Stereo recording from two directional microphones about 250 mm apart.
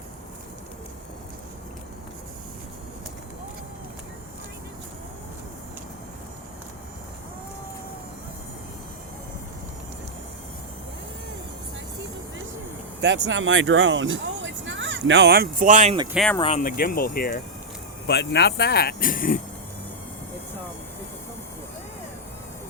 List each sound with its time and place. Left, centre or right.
13.0 s speech: right
16.1 s speech: centre
16.4 s speech: left